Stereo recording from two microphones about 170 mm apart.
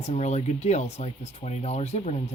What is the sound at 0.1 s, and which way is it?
Speech, 40° left (ahead or behind).